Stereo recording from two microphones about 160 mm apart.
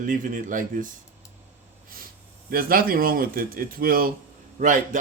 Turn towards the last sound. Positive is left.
turn(degrees=-55)  # may be behind; listen again after turning